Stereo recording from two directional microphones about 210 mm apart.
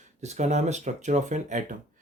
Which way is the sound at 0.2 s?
30° right (ahead or behind).